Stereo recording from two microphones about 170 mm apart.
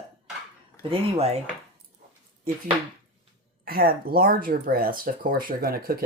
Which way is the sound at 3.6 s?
60° right (ahead or behind).